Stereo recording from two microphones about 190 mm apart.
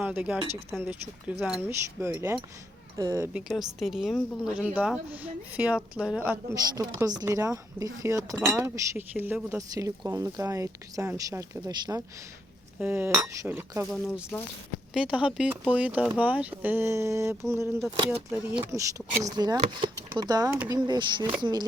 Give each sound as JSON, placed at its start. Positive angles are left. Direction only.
{"t": 0.0, "sound": "speech", "side_deg": -5}
{"t": 3.3, "sound": "a woman's voice", "side_deg": 0}
{"t": 8.4, "sound": "a woman's voice", "side_deg": -5}
{"t": 8.7, "sound": "a woman's voice", "side_deg": -15}
{"t": 18.7, "sound": "speech", "side_deg": -15}